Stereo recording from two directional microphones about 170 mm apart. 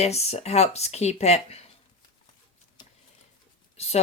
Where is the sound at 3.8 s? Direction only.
40° left (ahead or behind).